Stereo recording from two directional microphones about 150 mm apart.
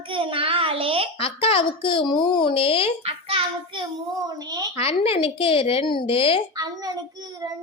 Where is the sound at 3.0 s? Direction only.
35° right (ahead or behind).